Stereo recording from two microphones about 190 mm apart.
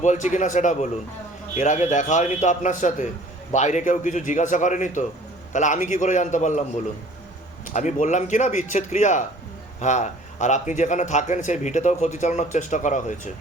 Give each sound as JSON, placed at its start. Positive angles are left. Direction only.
{"t": 0.0, "sound": "a man's voice", "side_deg": 40}
{"t": 7.7, "sound": "a man's voice", "side_deg": 40}